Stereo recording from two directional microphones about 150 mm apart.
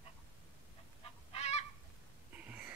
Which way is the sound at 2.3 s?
10° right (ahead or behind).